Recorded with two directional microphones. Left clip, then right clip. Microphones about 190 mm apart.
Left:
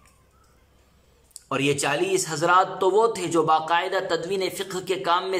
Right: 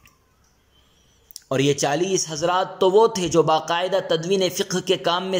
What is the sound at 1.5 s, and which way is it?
A man's voice, 20° right (ahead or behind).